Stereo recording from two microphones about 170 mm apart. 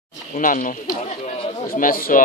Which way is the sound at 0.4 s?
50° left (ahead or behind).